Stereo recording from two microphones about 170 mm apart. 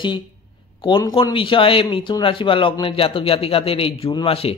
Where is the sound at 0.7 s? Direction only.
25° left (ahead or behind).